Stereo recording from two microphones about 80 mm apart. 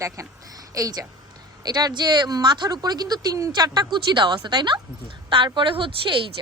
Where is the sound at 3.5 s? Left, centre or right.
Right.